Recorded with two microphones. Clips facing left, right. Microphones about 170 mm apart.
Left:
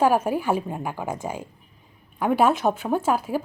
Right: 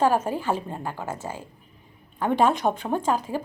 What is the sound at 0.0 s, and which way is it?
Speech, 10° left (ahead or behind).